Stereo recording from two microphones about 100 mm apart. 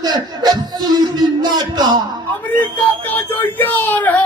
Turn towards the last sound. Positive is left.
turn(degrees=15)  # may be behind; listen again after turning